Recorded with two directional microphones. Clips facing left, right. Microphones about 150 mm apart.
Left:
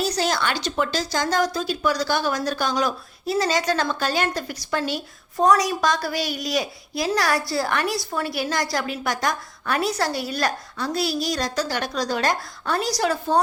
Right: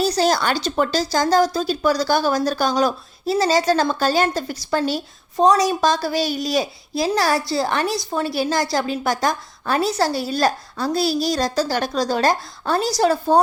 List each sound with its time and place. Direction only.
0.0 s a woman's voice: 35° right (ahead or behind)